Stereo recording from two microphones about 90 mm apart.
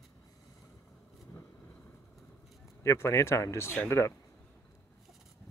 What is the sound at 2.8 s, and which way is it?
Speech, 30° left (ahead or behind).